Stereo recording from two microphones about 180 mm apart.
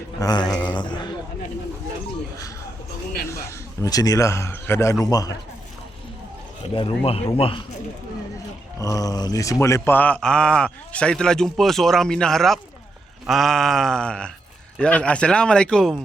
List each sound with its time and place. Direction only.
0.2 s a man's voice: 20° left (ahead or behind)
3.2 s a man's voice: 15° left (ahead or behind)
6.7 s speech: 30° left (ahead or behind)
8.8 s speech: 20° left (ahead or behind); by 16.0 s centre (ahead or behind)